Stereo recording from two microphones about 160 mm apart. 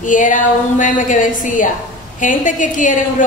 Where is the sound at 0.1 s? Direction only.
55° left (ahead or behind).